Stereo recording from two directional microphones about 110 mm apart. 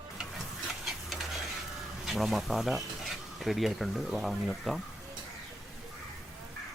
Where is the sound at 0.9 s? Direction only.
Centre (ahead or behind).